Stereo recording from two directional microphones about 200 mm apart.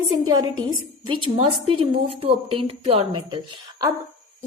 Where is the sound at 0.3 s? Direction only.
20° right (ahead or behind).